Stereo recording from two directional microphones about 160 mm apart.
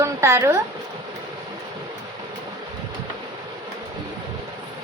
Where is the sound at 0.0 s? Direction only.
15° right (ahead or behind).